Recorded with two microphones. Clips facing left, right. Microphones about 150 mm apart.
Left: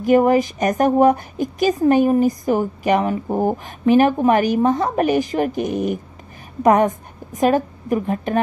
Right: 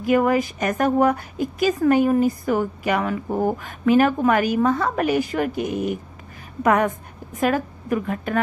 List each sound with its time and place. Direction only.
0.1 s a woman's voice: 25° left (ahead or behind)
7.3 s a woman's voice: 25° left (ahead or behind)